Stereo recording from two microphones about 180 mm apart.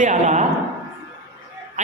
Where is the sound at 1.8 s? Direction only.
40° right (ahead or behind).